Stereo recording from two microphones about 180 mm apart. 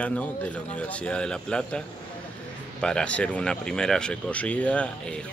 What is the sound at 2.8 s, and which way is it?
Speech, 5° left (ahead or behind).